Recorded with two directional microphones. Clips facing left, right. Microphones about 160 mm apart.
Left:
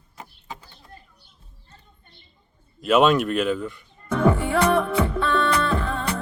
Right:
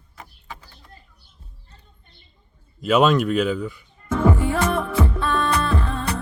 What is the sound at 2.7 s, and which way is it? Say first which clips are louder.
Speech: even; centre (ahead or behind).